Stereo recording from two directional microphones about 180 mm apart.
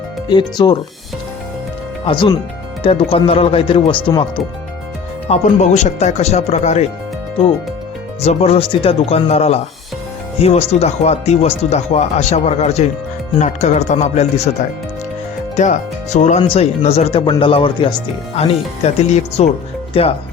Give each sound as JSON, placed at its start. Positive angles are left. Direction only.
{"t": 0.3, "sound": "speech", "side_deg": 25}
{"t": 2.0, "sound": "speech", "side_deg": 25}
{"t": 5.3, "sound": "speech", "side_deg": 40}
{"t": 8.2, "sound": "speech", "side_deg": 35}